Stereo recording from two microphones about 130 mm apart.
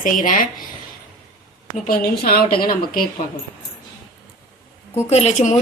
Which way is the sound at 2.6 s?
90° left.